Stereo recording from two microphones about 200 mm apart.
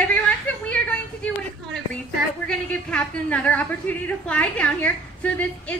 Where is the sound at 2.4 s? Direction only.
5° left (ahead or behind).